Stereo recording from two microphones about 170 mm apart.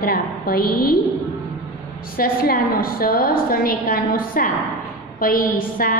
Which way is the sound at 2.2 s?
60° left (ahead or behind).